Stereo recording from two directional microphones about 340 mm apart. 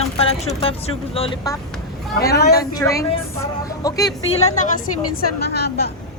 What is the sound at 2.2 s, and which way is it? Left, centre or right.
Music, left.